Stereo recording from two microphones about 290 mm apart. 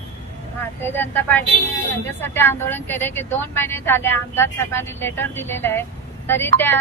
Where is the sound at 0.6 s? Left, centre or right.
Centre.